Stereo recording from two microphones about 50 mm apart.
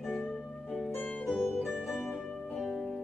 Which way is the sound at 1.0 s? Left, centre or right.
Left.